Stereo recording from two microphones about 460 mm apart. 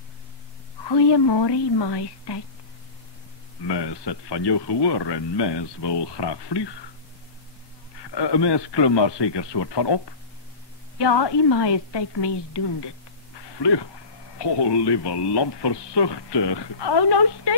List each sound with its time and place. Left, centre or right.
0.8 s a man's voice: left
3.6 s a man's voice: left
8.0 s a man's voice: left